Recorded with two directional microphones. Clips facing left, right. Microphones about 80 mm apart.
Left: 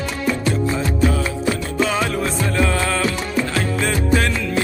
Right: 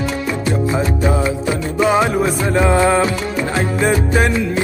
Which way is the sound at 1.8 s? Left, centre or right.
Right.